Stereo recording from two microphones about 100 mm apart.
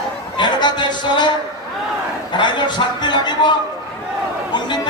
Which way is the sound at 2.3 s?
50° left (ahead or behind).